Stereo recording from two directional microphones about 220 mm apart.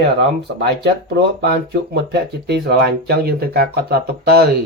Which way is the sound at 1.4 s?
50° right (ahead or behind).